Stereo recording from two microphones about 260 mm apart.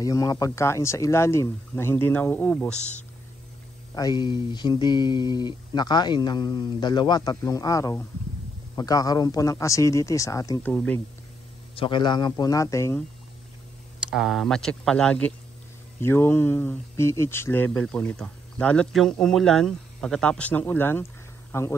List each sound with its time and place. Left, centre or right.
0.0 s speech: centre
3.9 s speech: centre
11.7 s speech: centre
13.9 s speech: centre